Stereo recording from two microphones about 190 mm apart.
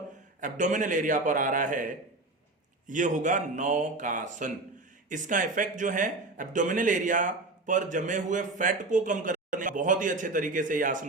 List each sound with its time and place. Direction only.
0.3 s a man's voice: 40° right (ahead or behind)